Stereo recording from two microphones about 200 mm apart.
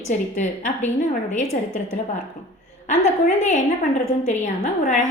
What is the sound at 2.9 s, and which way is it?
A woman's voice, 35° left (ahead or behind).